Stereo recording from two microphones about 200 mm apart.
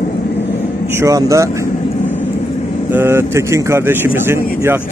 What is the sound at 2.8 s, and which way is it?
Speech, 10° right (ahead or behind).